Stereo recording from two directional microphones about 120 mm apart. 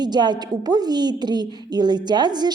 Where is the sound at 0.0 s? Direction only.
35° right (ahead or behind).